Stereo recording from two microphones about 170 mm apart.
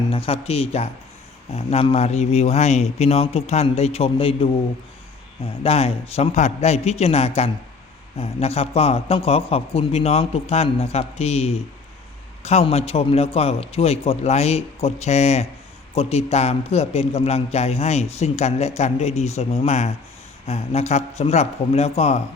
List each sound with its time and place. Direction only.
0.1 s a man's voice: 35° left (ahead or behind)
5.6 s a man's voice: 35° left (ahead or behind)